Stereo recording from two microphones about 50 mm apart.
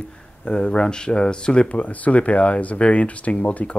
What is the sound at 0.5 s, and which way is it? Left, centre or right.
Speech, centre.